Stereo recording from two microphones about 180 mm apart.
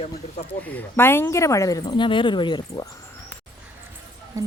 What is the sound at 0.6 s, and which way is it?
Speech, 10° left (ahead or behind).